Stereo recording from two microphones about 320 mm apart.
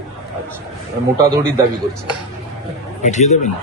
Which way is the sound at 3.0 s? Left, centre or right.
Left.